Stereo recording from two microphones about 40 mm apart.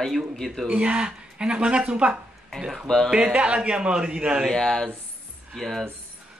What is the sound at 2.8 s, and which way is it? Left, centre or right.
Speech, centre.